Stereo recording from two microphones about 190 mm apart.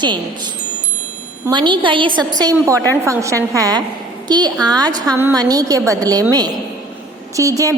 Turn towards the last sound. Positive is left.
turn(degrees=-15)  # may be behind; listen again after turning